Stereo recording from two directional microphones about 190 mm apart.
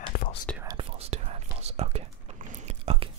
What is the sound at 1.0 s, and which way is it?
Whispering, 35° right (ahead or behind).